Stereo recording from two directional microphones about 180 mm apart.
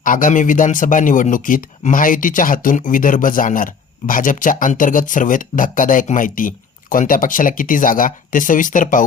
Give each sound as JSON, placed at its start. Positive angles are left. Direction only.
{"t": 0.0, "sound": "speech", "side_deg": 50}